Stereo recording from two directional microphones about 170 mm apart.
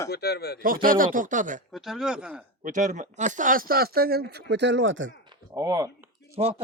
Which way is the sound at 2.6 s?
45° right (ahead or behind).